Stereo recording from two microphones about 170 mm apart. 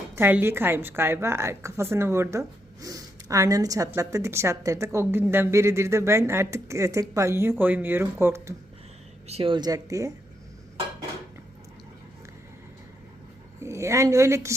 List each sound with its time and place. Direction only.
0.2 s a woman's voice: 10° right (ahead or behind)
9.2 s speech: 35° right (ahead or behind); by 10.1 s 20° right (ahead or behind)
13.6 s a woman's voice: 15° right (ahead or behind)